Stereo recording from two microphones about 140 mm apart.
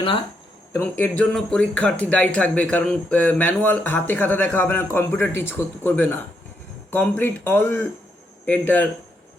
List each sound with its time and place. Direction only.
0.7 s speech: 15° left (ahead or behind)